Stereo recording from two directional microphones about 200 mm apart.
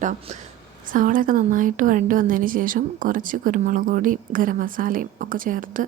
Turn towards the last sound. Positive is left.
turn(degrees=-45)  # may be behind; listen again after turning